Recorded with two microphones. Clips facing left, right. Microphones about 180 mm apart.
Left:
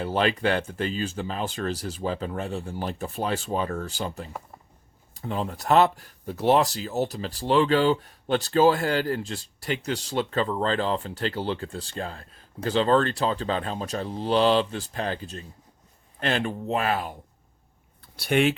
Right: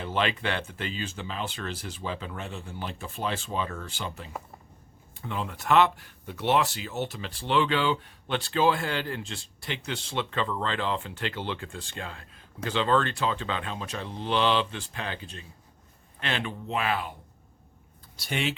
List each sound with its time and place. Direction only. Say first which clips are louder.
0.0 s speech: left 5 dB; 40° left (ahead or behind)
18.2 s speech: left 9 dB; 55° left (ahead or behind)